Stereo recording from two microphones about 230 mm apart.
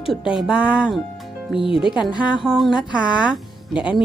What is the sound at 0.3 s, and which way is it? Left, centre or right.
Speech, centre.